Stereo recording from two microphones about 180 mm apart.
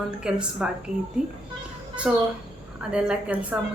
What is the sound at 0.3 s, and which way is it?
Speech, 5° right (ahead or behind).